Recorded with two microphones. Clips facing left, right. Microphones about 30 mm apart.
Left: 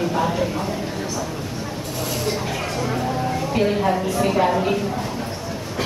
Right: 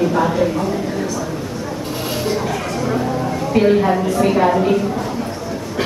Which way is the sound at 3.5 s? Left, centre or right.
Centre.